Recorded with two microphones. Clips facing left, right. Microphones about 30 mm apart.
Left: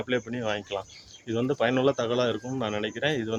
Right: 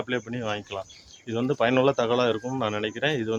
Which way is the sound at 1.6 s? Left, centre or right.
Centre.